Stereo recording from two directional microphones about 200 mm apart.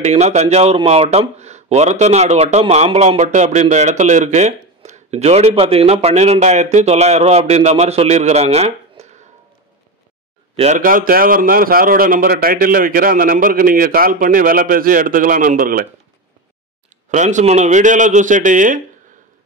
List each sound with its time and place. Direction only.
0.0 s speech: 35° right (ahead or behind)
10.5 s a sound: 30° right (ahead or behind)
10.8 s a man's voice: 45° right (ahead or behind)
17.1 s speech: 35° right (ahead or behind)